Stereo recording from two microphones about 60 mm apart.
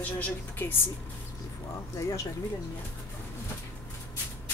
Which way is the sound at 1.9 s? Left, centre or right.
Left.